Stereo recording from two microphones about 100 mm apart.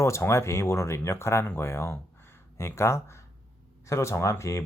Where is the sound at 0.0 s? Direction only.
30° left (ahead or behind).